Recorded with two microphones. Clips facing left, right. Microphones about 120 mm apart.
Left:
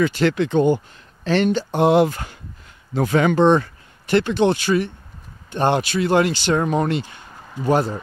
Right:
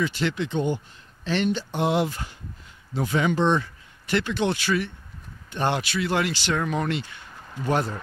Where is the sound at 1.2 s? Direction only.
45° left (ahead or behind).